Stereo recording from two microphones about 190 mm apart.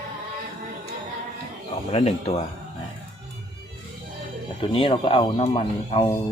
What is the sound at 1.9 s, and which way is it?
Speech, 35° left (ahead or behind).